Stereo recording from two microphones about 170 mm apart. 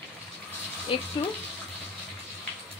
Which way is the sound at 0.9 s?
30° left (ahead or behind).